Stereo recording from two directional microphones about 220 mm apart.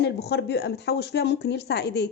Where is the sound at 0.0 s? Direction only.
50° left (ahead or behind).